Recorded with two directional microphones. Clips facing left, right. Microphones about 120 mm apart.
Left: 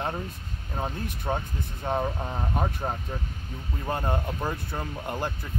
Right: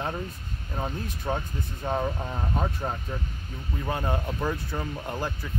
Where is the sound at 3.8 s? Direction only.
Centre (ahead or behind).